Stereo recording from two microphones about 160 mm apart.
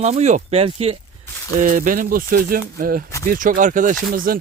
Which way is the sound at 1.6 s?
55° right (ahead or behind).